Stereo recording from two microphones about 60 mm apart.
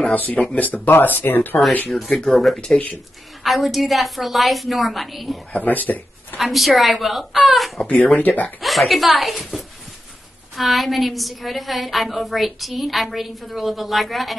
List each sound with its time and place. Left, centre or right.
0.1 s speech: left
1.9 s a woman's voice: centre
5.5 s speech: left
6.3 s a woman's voice: centre
7.8 s speech: left
8.5 s a woman's voice: centre